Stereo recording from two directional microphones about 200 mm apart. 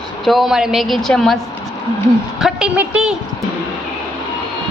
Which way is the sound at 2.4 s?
5° right (ahead or behind).